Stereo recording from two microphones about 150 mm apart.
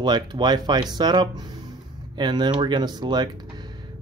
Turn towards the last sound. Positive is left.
turn(degrees=-30)  # may be behind; listen again after turning